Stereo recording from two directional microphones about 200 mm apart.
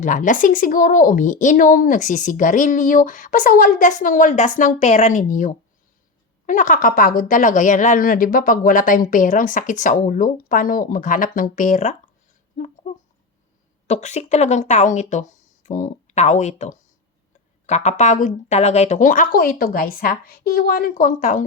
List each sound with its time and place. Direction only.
0.0 s speech: 40° left (ahead or behind)
13.8 s speech: 35° left (ahead or behind)